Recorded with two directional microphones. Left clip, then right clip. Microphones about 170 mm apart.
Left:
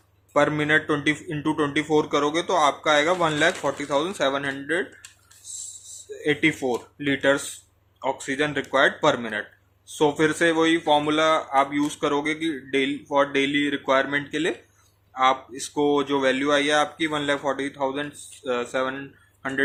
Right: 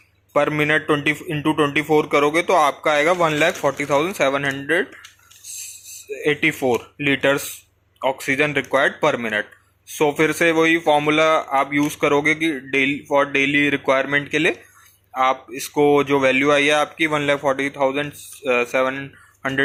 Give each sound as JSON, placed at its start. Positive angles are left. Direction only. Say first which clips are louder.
{"t": 0.3, "sound": "a man's voice", "louder": "right 2 dB", "side_deg": -25}
{"t": 6.1, "sound": "a man's voice", "louder": "right 3 dB", "side_deg": -25}